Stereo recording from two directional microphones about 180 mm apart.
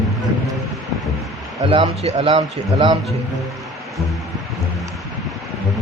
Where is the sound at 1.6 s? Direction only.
30° right (ahead or behind).